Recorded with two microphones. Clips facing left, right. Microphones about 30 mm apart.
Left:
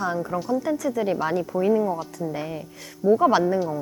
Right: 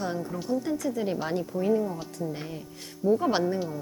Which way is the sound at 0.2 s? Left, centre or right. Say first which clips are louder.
Left 7 dB; left.